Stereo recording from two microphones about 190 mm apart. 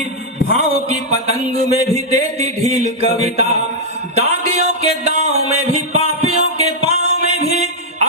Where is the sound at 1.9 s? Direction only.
35° right (ahead or behind).